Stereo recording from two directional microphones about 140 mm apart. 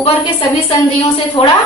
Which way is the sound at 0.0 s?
40° left (ahead or behind).